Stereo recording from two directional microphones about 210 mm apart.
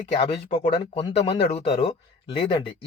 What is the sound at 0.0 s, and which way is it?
Speech, 30° left (ahead or behind).